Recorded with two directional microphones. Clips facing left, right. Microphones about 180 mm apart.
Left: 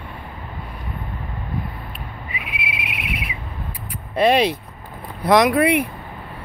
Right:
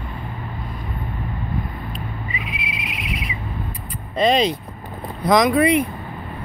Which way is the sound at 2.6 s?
65° left (ahead or behind).